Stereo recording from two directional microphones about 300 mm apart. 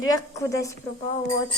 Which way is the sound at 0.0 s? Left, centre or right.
Centre.